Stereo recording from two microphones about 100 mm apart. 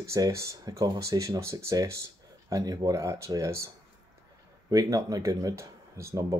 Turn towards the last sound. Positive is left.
turn(degrees=-30)  # may be behind; listen again after turning